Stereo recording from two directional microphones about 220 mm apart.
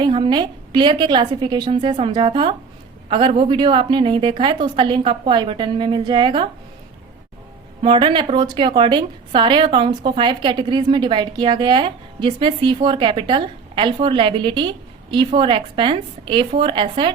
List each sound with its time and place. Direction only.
0.0 s a woman's voice: 20° right (ahead or behind)
7.8 s a woman's voice: 25° right (ahead or behind)